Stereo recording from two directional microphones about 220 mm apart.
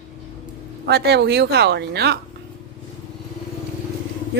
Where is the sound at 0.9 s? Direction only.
50° right (ahead or behind).